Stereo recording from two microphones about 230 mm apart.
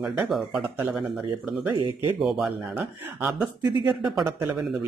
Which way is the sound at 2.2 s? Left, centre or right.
Centre.